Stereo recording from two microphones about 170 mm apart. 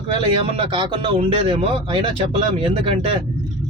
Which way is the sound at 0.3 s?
30° right (ahead or behind).